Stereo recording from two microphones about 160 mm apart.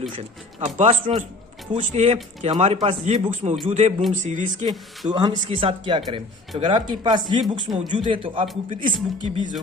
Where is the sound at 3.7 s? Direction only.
45° right (ahead or behind).